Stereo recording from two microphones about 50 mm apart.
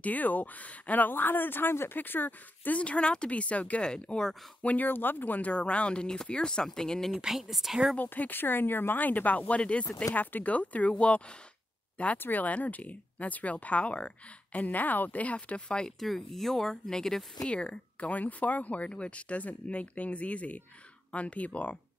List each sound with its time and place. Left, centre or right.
0.0 s speech: left
2.8 s speech: left
3.8 s speech: centre
4.6 s speech: left; by 7.1 s centre
7.2 s speech: centre
8.0 s speech: left
12.2 s speech: left
16.0 s speech: centre; by 21.7 s left